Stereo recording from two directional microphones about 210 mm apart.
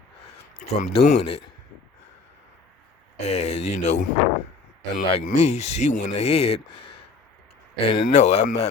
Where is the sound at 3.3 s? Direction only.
35° left (ahead or behind).